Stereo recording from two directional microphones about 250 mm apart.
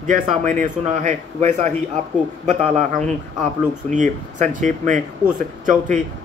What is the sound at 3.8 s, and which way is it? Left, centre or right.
Speech, right.